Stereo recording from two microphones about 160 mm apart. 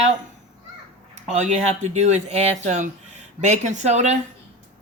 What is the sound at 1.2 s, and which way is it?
Speech, 40° right (ahead or behind).